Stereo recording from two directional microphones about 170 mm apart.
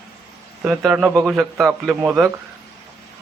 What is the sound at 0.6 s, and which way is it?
A man's voice, 5° right (ahead or behind).